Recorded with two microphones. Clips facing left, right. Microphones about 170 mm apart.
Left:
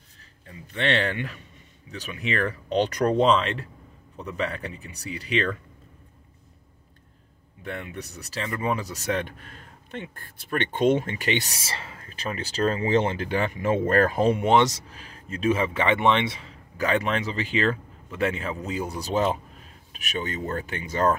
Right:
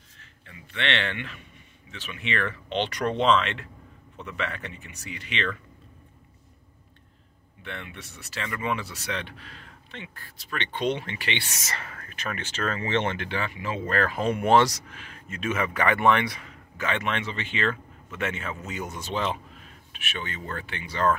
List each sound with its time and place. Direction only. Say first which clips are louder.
0.2 s a man's voice: left 4 dB; 40° left (ahead or behind)
7.6 s speech: left 5 dB; 40° left (ahead or behind)
14.2 s speech: right 3 dB; 25° left (ahead or behind); by 21.2 s 45° left (ahead or behind)